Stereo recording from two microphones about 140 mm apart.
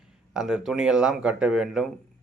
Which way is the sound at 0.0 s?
5° right (ahead or behind).